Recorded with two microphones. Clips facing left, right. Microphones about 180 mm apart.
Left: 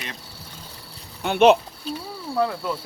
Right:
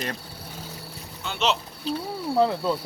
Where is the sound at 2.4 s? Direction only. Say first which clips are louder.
Right 2 dB; 25° right (ahead or behind).